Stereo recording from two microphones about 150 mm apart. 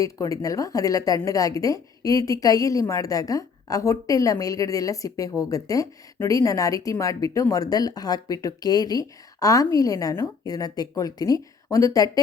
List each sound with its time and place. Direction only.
0.0 s a woman's voice: 25° left (ahead or behind)